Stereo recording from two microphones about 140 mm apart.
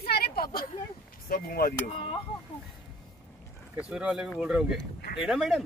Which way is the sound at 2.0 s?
40° left (ahead or behind).